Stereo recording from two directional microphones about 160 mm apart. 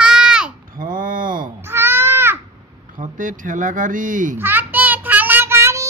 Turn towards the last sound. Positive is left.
turn(degrees=-15)  # may be behind; listen again after turning